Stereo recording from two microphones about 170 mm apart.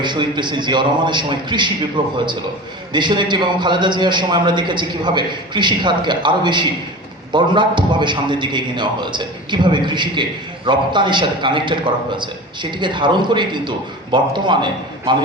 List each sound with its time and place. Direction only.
0.0 s a man's voice: 25° right (ahead or behind)
12.8 s a man's voice: 30° right (ahead or behind)